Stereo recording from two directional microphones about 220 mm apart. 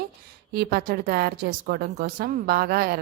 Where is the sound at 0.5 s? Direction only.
45° right (ahead or behind).